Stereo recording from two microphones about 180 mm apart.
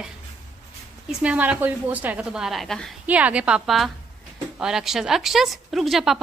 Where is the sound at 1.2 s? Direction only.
5° right (ahead or behind).